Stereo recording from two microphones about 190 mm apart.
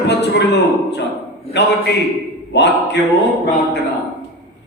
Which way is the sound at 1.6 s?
65° left (ahead or behind).